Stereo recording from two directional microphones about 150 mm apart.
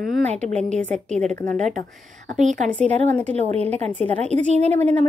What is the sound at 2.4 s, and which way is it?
Speech, 55° right (ahead or behind).